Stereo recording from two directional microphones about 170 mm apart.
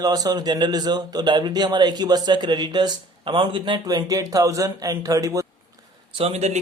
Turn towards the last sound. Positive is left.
turn(degrees=-40)  # may be behind; listen again after turning